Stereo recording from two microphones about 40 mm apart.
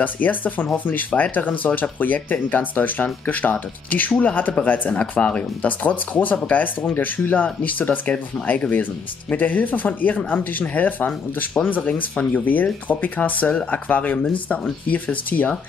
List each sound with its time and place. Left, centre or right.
0.0 s speech: left